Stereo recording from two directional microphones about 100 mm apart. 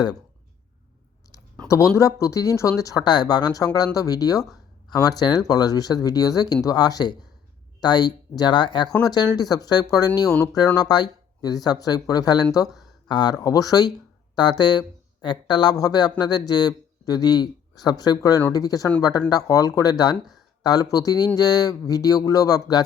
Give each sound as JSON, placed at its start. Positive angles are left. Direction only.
{"t": 2.0, "sound": "speech", "side_deg": 30}